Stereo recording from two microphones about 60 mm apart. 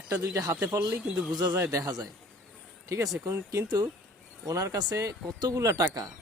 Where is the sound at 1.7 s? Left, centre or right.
Right.